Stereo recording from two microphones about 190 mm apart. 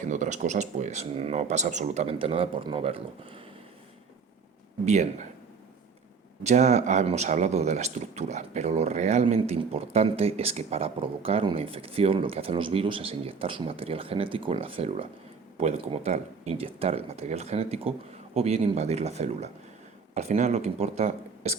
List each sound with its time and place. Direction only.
0.0 s speech: 40° right (ahead or behind)
6.4 s speech: 35° right (ahead or behind)